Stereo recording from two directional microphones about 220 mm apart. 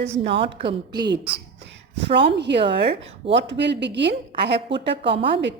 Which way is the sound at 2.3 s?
50° right (ahead or behind).